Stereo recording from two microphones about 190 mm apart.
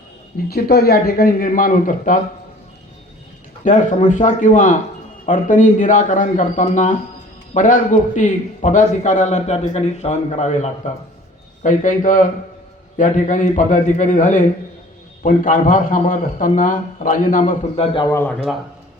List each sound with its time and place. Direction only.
0.4 s a man's voice: 55° left (ahead or behind)
3.6 s a man's voice: 40° left (ahead or behind)
17.9 s a man's voice: 15° left (ahead or behind)